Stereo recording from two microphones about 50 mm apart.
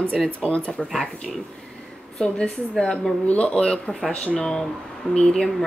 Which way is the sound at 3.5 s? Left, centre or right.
Centre.